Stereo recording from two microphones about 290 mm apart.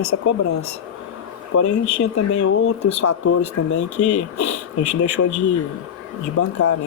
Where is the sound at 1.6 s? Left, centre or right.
Left.